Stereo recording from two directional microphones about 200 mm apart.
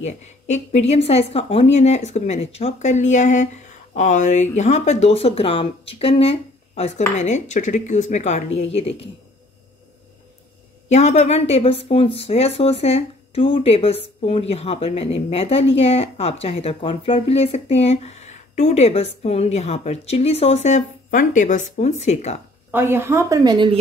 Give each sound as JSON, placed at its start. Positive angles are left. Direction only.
{"t": 0.0, "sound": "speech", "side_deg": 35}
{"t": 10.9, "sound": "speech", "side_deg": 35}
{"t": 22.7, "sound": "a woman's voice", "side_deg": -10}